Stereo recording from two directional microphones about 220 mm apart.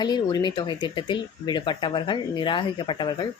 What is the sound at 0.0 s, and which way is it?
Speech, 20° left (ahead or behind).